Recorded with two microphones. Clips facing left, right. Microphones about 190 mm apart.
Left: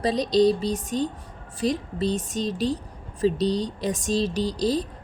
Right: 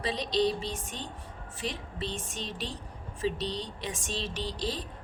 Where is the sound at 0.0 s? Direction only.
40° left (ahead or behind).